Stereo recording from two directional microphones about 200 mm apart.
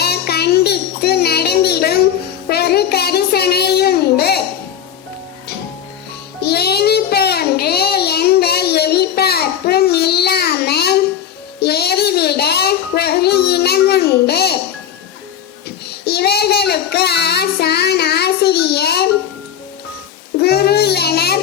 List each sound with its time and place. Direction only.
0.0 s child singing: 50° left (ahead or behind)
6.4 s child singing: 55° left (ahead or behind)
11.6 s a sound: 55° left (ahead or behind)
16.0 s child singing: 55° left (ahead or behind)
20.4 s child singing: 55° left (ahead or behind)